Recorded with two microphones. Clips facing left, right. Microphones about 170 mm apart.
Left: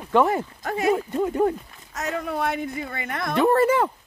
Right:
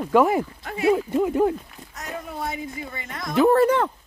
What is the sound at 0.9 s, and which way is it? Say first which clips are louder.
Speech: right 3 dB; 5° right (ahead or behind).